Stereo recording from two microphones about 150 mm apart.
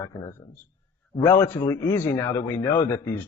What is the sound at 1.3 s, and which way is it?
Speech, 15° left (ahead or behind).